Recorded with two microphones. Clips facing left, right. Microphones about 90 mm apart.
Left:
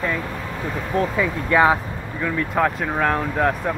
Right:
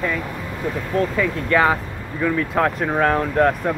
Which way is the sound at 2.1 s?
Centre (ahead or behind).